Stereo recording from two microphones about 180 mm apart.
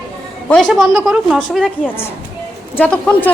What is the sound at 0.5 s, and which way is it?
A woman's voice, centre (ahead or behind).